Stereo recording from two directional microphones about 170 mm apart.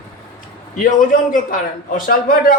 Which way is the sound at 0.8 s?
50° left (ahead or behind).